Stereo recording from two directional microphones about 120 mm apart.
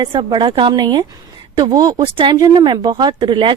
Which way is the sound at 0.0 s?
40° right (ahead or behind).